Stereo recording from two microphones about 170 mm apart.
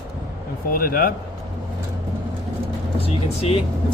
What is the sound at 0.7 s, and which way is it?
Speech, 60° left (ahead or behind).